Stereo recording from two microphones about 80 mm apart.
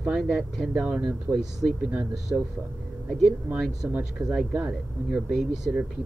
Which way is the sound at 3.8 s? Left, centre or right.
Centre.